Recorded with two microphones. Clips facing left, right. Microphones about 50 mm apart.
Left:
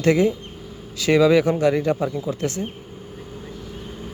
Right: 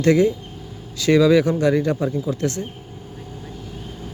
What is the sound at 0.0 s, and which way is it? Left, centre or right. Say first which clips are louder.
Speech: right 2 dB; centre.